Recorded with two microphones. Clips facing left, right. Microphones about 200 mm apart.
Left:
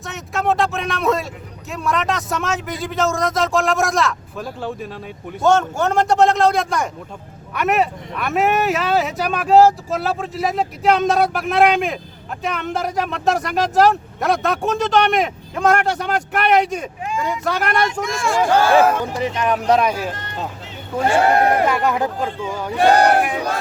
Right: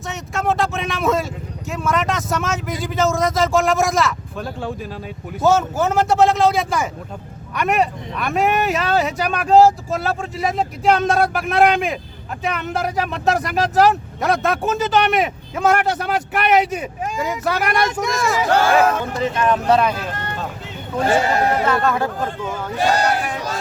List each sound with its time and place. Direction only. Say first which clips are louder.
0.0 s a sound: left 1 dB; centre (ahead or behind)
1.7 s speech: even; centre (ahead or behind)
18.9 s speech: even; 10° left (ahead or behind)
21.2 s speech: left 3 dB; 60° left (ahead or behind)
21.7 s speech: even; 15° left (ahead or behind)
22.8 s speech: left 5 dB; 60° left (ahead or behind)